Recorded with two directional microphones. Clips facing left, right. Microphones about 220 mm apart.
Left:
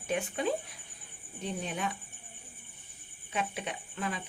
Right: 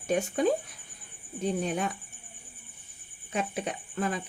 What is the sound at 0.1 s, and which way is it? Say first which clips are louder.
Speech: right 6 dB; 40° right (ahead or behind).